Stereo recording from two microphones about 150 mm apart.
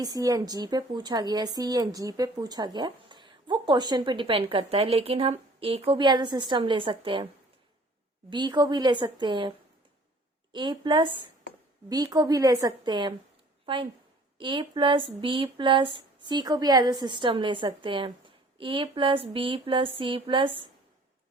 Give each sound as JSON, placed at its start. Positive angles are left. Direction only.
{"t": 0.0, "sound": "a woman's voice", "side_deg": -25}
{"t": 8.3, "sound": "a woman's voice", "side_deg": -30}
{"t": 10.5, "sound": "a woman's voice", "side_deg": -30}